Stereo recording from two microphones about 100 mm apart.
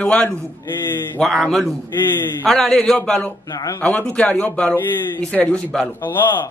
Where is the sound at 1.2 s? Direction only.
Centre (ahead or behind).